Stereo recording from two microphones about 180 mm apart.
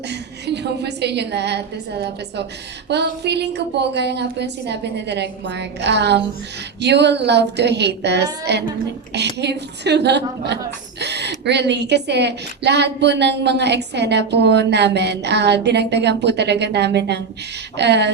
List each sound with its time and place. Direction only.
0.1 s a woman's voice: 70° right (ahead or behind)